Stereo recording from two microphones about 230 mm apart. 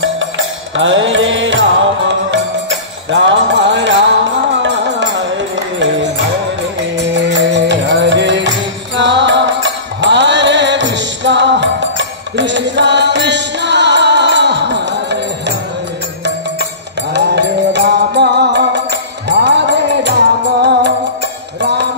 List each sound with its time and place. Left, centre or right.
0.7 s music: right
7.0 s music: right
17.1 s music: right
21.5 s mantra: right